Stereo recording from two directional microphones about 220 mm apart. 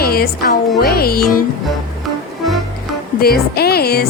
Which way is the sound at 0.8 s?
45° left (ahead or behind).